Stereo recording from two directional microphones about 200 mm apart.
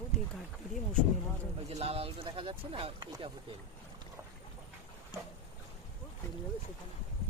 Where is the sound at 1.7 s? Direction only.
30° right (ahead or behind).